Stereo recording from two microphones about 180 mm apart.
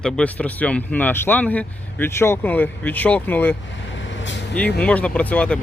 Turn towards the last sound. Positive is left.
turn(degrees=5)  # may be behind; listen again after turning